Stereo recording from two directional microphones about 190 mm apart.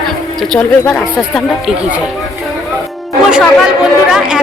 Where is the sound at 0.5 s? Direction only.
5° left (ahead or behind).